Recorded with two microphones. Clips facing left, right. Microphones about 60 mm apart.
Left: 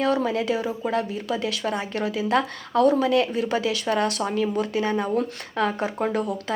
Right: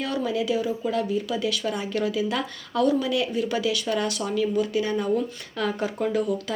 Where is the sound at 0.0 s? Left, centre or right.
Left.